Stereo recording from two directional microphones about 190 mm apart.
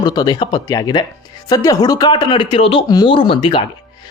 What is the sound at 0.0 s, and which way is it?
A man's voice, 20° left (ahead or behind).